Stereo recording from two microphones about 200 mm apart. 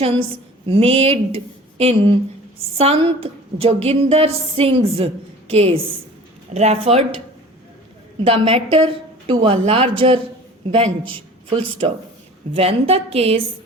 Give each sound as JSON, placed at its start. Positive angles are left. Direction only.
{"t": 0.0, "sound": "a woman's voice", "side_deg": -30}
{"t": 8.2, "sound": "a woman's voice", "side_deg": -30}